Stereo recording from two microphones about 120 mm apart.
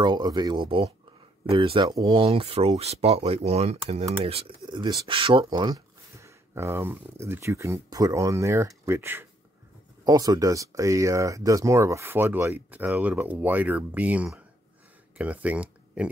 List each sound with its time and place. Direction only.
0.0 s speech: 35° right (ahead or behind); by 4.5 s 60° right (ahead or behind)
4.6 s speech: 40° right (ahead or behind)
6.1 s speech: 25° right (ahead or behind)
10.0 s speech: 30° right (ahead or behind); by 16.1 s 10° right (ahead or behind)